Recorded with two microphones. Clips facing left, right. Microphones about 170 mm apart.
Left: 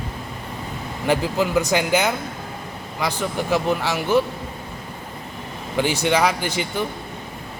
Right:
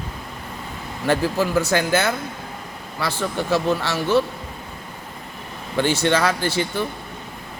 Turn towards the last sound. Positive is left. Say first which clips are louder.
# right 2 dB
turn(degrees=15)  # may be behind; listen again after turning